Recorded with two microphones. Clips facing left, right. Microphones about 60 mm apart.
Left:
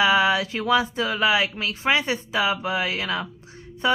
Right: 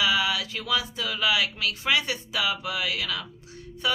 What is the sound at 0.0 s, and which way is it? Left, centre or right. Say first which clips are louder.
A woman's voice: left 6 dB; left.